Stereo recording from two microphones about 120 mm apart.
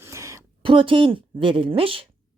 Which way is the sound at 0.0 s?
25° right (ahead or behind).